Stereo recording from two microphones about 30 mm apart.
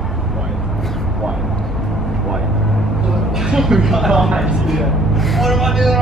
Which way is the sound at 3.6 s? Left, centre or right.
Centre.